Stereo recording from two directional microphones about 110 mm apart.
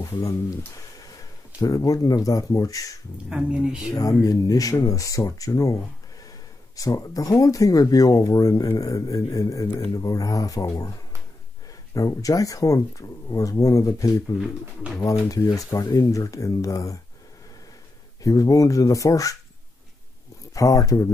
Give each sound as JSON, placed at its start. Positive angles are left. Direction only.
{"t": 0.1, "sound": "speech", "side_deg": 30}
{"t": 1.6, "sound": "speech", "side_deg": 35}
{"t": 3.3, "sound": "speech", "side_deg": -10}
{"t": 3.9, "sound": "speech", "side_deg": 30}
{"t": 6.8, "sound": "speech", "side_deg": 30}
{"t": 11.9, "sound": "speech", "side_deg": 30}
{"t": 18.2, "sound": "speech", "side_deg": 30}
{"t": 20.5, "sound": "speech", "side_deg": 30}